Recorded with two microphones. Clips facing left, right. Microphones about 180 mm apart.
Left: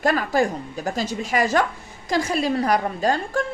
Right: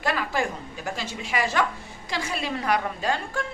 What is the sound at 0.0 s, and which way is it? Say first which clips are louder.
Speech: left 6 dB; 45° left (ahead or behind).